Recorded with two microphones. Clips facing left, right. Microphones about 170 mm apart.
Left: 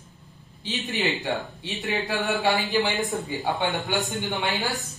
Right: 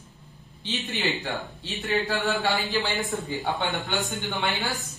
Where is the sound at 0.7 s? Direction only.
20° left (ahead or behind).